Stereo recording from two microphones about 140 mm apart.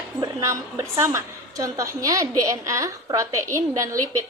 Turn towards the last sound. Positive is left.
turn(degrees=-20)  # may be behind; listen again after turning